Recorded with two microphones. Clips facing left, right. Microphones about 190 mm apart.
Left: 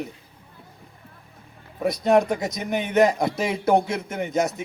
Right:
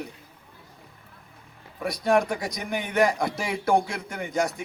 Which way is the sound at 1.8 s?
20° left (ahead or behind).